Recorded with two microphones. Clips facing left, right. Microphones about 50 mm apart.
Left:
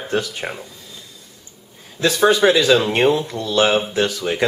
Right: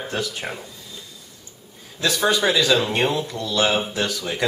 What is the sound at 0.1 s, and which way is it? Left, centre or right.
Speech, centre.